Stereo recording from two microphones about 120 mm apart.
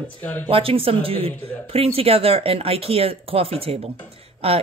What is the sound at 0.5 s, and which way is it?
Speech, 50° right (ahead or behind).